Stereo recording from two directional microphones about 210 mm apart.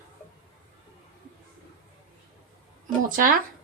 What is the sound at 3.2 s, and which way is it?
Speech, 40° right (ahead or behind).